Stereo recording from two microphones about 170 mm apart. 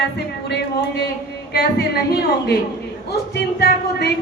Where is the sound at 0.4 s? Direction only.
80° left.